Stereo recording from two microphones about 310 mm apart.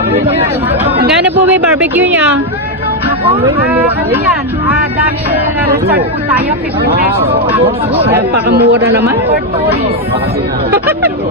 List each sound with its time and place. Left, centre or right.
1.2 s speech: centre
3.7 s speech: centre
8.4 s speech: right
10.7 s speech: centre